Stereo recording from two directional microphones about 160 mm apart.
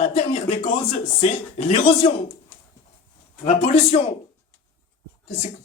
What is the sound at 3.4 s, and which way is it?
Speech, 40° left (ahead or behind).